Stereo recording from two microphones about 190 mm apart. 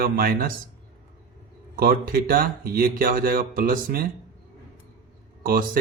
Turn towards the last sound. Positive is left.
turn(degrees=-50)  # may be behind; listen again after turning